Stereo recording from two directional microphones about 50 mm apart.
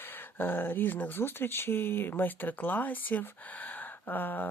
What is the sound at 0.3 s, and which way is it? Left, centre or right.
Speech, left.